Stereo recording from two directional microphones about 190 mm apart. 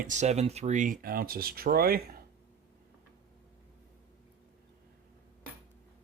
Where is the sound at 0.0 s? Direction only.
40° right (ahead or behind).